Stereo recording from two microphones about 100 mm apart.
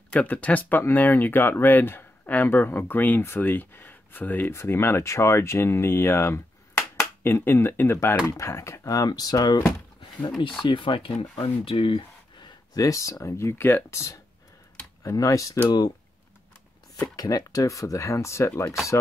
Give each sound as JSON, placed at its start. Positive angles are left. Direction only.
{"t": 0.1, "sound": "speech", "side_deg": 15}
{"t": 12.7, "sound": "speech", "side_deg": 35}
{"t": 17.1, "sound": "speech", "side_deg": 40}